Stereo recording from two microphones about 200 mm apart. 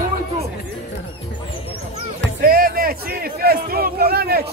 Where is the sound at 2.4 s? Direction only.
45° right (ahead or behind).